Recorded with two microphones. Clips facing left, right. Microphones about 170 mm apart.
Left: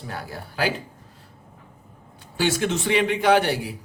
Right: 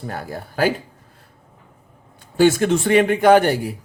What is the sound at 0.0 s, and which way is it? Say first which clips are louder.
Speech: right 5 dB; 50° right (ahead or behind).